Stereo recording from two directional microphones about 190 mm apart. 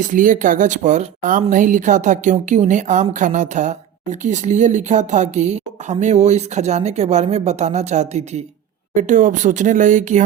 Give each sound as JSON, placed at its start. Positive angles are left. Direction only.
{"t": 0.0, "sound": "speech", "side_deg": -45}